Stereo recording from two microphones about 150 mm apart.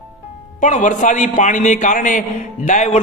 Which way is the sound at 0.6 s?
55° left (ahead or behind).